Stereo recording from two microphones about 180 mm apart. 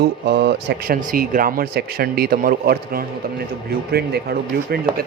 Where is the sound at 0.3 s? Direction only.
60° right (ahead or behind).